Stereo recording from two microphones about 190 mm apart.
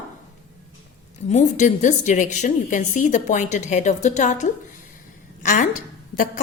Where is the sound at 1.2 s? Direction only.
40° left (ahead or behind).